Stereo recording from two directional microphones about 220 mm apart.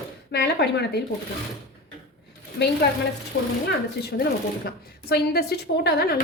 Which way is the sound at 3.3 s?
45° left (ahead or behind).